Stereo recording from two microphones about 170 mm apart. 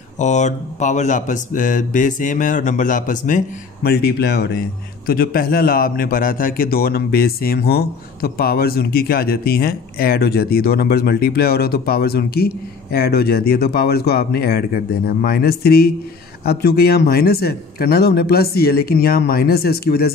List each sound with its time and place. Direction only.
0.2 s speech: 45° left (ahead or behind)
3.8 s speech: 70° left (ahead or behind)
5.0 s a man's voice: 60° left (ahead or behind)